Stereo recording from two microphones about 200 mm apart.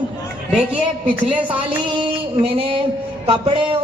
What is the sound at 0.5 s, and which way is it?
Speech, 5° right (ahead or behind).